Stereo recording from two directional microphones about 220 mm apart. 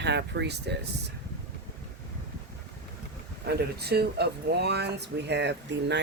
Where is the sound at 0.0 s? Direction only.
50° right (ahead or behind).